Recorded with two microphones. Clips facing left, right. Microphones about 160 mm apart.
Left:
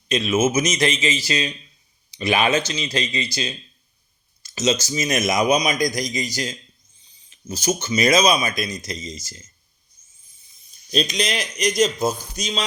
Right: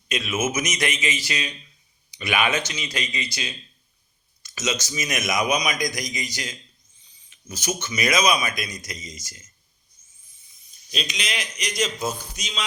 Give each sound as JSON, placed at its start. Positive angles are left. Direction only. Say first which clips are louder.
{"t": 0.1, "sound": "speech", "louder": "left 6 dB", "side_deg": 25}
{"t": 4.4, "sound": "a man's voice", "louder": "left 6 dB", "side_deg": 30}
{"t": 10.9, "sound": "a man's voice", "louder": "left 8 dB", "side_deg": 40}